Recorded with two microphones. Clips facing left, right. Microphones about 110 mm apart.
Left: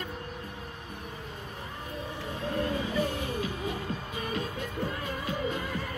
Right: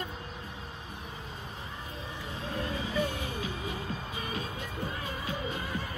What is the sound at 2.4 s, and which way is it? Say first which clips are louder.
Music: left 5 dB; 50° left (ahead or behind).